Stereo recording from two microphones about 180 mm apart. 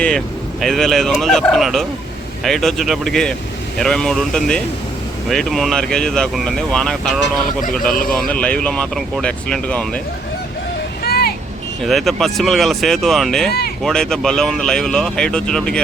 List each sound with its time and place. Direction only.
0.6 s speech: centre (ahead or behind)
11.0 s vehicle: 60° left (ahead or behind)
11.8 s speech: centre (ahead or behind)